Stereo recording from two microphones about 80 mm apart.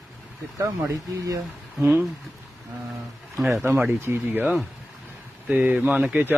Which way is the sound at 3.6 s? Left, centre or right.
Right.